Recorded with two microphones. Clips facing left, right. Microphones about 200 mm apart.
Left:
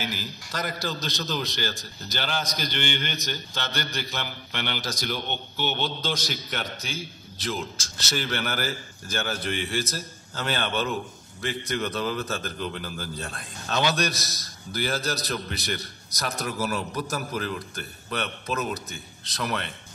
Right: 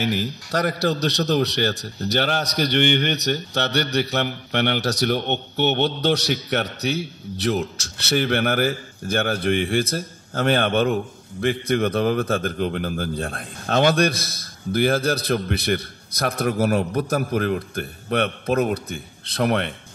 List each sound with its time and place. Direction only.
0.0 s a man's voice: 65° right (ahead or behind)